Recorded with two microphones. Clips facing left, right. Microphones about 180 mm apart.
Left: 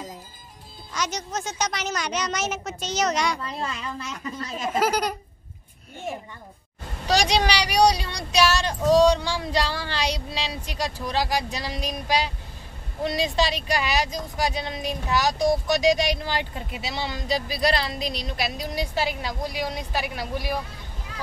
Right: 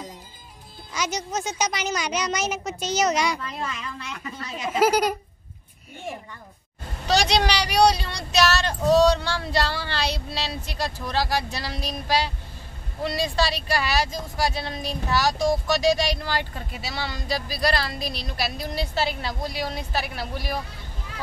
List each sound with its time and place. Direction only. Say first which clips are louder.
0.9 s a woman's voice: right 1 dB; centre (ahead or behind)
3.4 s a woman's voice: left 1 dB; 35° left (ahead or behind)
4.7 s speech: right 4 dB; 10° right (ahead or behind)
7.1 s speech: even; 10° left (ahead or behind)